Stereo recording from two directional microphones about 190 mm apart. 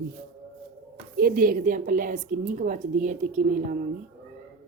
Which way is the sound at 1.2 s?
50° right (ahead or behind).